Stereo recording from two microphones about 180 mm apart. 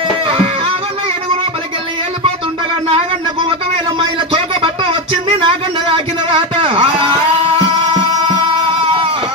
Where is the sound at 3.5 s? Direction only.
30° right (ahead or behind).